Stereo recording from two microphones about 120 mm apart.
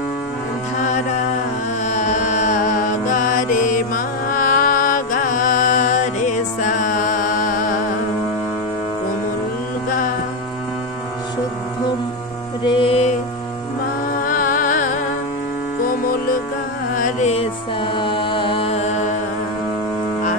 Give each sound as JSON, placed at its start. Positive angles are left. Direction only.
{"t": 0.7, "sound": "music", "side_deg": 90}
{"t": 12.6, "sound": "music", "side_deg": 45}
{"t": 14.6, "sound": "music", "side_deg": 90}
{"t": 16.9, "sound": "music", "side_deg": 80}
{"t": 17.9, "sound": "music", "side_deg": 45}